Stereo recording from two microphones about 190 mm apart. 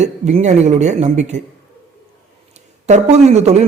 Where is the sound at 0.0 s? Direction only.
35° right (ahead or behind).